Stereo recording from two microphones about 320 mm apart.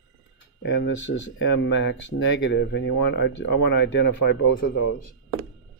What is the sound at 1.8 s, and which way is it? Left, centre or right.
Speech, left.